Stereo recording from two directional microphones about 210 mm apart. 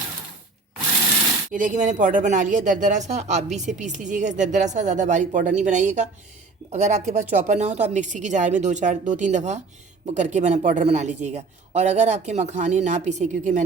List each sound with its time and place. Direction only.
1.5 s a man's voice: 40° right (ahead or behind)